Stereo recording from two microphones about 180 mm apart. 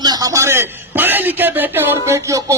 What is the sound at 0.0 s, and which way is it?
A man's voice, 20° right (ahead or behind).